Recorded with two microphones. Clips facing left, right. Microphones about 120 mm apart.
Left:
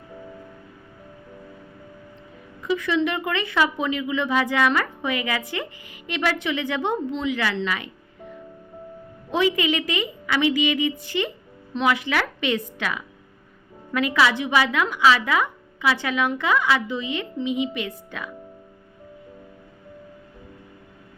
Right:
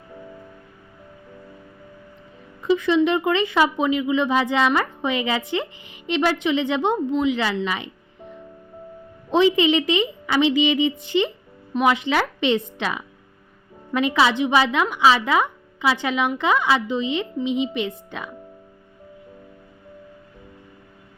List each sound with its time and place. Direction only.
2.6 s speech: 20° right (ahead or behind)
7.5 s music: 20° right (ahead or behind)
9.3 s speech: 25° right (ahead or behind)